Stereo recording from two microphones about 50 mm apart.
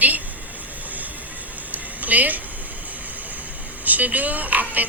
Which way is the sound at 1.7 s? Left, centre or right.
Right.